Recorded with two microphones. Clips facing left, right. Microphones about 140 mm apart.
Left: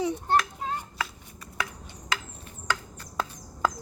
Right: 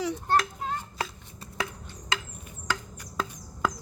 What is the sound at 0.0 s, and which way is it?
Children playing, 20° left (ahead or behind).